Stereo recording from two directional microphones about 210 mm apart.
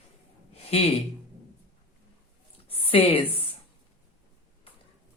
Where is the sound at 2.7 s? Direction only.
25° left (ahead or behind).